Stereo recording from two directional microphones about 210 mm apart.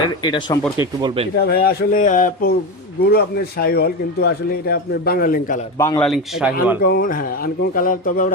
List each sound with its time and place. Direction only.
0.2 s speech: 20° left (ahead or behind)
0.8 s speech: 25° right (ahead or behind)
1.4 s a man's voice: 45° left (ahead or behind)
6.0 s speech: centre (ahead or behind)
6.8 s a man's voice: 45° left (ahead or behind)